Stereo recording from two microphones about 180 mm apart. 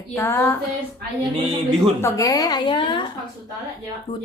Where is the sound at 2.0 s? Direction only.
15° left (ahead or behind).